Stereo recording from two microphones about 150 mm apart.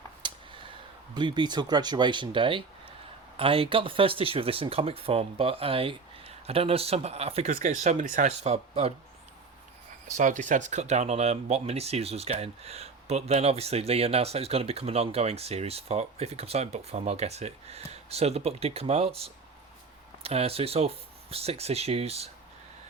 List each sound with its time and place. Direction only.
0.2 s a sound: 30° right (ahead or behind)
1.1 s speech: 30° right (ahead or behind)
7.5 s speech: 55° right (ahead or behind)
10.2 s speech: 55° right (ahead or behind)